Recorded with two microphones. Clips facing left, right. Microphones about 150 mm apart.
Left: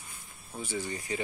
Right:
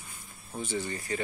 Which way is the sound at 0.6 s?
10° left (ahead or behind).